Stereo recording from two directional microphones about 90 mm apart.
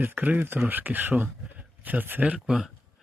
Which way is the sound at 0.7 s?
20° right (ahead or behind).